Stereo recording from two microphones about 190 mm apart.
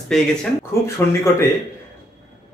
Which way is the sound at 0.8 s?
15° left (ahead or behind).